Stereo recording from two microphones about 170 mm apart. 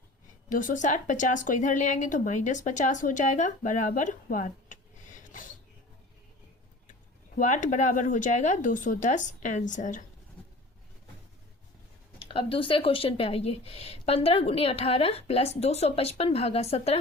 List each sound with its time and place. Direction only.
0.5 s speech: 50° left (ahead or behind)
7.3 s speech: 45° left (ahead or behind)
12.2 s speech: 30° left (ahead or behind)